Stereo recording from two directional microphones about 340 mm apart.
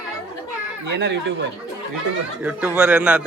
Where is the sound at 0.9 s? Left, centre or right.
Right.